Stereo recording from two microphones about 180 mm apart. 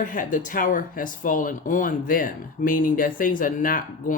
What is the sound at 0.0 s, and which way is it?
Speech, 45° left (ahead or behind).